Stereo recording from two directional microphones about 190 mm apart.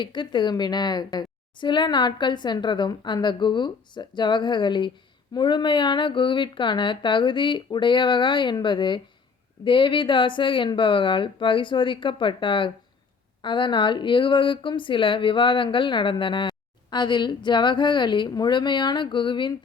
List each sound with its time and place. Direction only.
0.0 s speech: 25° left (ahead or behind)